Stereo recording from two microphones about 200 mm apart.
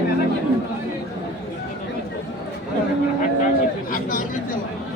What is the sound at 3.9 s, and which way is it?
Speech, 40° left (ahead or behind).